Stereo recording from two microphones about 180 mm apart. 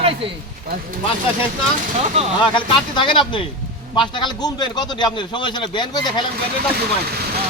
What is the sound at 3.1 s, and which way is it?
Speech, 25° left (ahead or behind).